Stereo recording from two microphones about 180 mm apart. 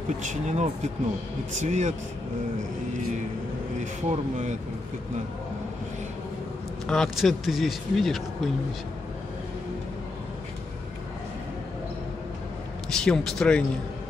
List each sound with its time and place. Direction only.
0.2 s speech: 40° right (ahead or behind)
3.8 s speech: 40° right (ahead or behind)
6.9 s speech: centre (ahead or behind)
12.9 s speech: 5° left (ahead or behind)